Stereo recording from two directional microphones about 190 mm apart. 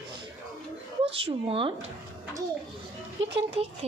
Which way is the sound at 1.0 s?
30° right (ahead or behind).